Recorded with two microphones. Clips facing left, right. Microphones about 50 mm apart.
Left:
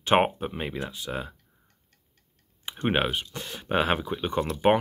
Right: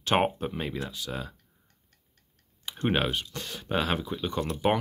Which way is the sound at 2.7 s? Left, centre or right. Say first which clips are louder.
Left 1 dB; centre.